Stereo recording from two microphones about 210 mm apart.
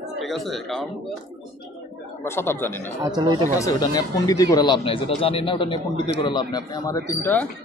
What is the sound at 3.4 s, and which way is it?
Speech, 15° left (ahead or behind).